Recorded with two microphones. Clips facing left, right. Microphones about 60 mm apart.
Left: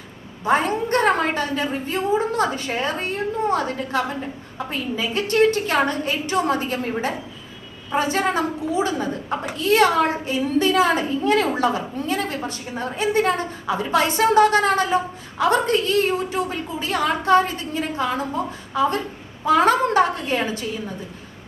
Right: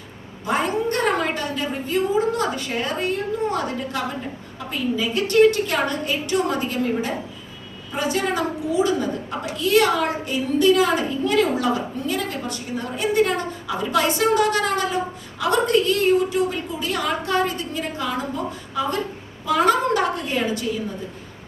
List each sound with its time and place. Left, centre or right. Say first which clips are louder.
0.4 s a woman's voice: left 2 dB; left